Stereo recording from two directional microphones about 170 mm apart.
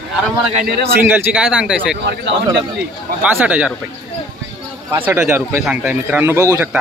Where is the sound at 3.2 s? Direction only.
10° right (ahead or behind).